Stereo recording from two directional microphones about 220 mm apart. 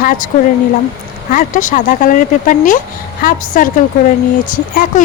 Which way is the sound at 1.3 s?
35° left (ahead or behind).